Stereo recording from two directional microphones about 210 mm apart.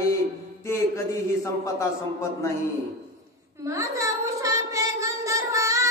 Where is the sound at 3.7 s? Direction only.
15° right (ahead or behind).